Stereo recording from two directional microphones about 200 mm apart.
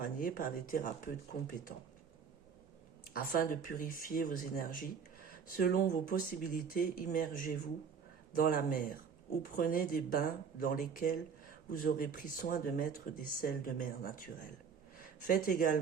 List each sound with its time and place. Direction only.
0.0 s speech: 45° left (ahead or behind)
3.1 s speech: 45° left (ahead or behind)